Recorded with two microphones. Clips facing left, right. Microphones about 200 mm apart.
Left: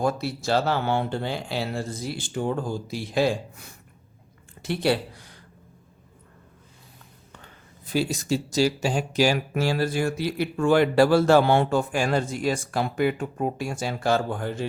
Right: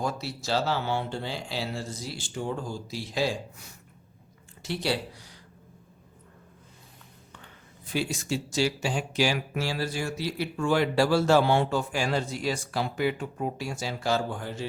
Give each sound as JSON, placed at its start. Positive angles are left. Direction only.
{"t": 0.0, "sound": "speech", "side_deg": 55}
{"t": 7.9, "sound": "speech", "side_deg": 40}